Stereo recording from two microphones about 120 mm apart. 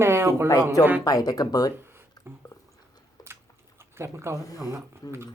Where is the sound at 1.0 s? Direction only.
30° left (ahead or behind).